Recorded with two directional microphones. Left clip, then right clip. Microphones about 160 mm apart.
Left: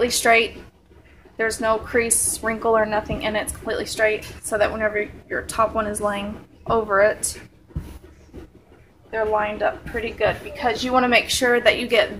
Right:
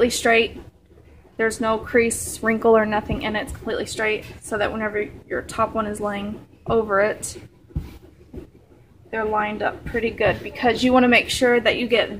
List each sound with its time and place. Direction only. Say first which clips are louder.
0.0 s speech: even; 25° right (ahead or behind)
9.1 s speech: left 1 dB; 25° right (ahead or behind)